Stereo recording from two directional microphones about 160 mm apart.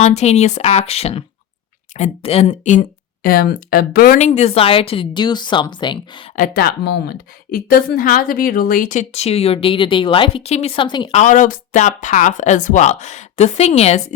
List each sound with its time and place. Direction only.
0.0 s a woman's voice: 40° left (ahead or behind)
3.2 s speech: 70° left (ahead or behind)
4.2 s speech: 40° left (ahead or behind)
6.3 s a woman's voice: 60° left (ahead or behind); by 11.1 s 30° left (ahead or behind)
11.1 s a woman's voice: 50° left (ahead or behind)